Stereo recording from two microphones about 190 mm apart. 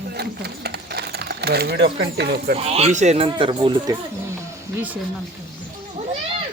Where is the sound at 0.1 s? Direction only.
60° right (ahead or behind).